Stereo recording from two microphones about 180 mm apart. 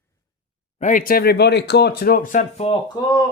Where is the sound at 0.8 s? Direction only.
45° left (ahead or behind).